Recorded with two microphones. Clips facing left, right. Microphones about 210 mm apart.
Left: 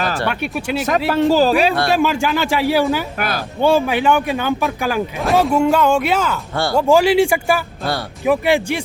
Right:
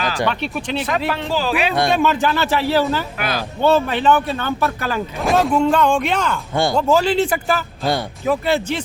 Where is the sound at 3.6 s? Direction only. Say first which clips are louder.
Left 1 dB; 10° left (ahead or behind).